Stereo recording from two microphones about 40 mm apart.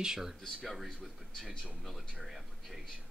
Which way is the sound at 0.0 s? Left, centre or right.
Centre.